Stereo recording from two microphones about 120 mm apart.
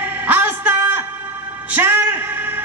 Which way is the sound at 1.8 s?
20° right (ahead or behind).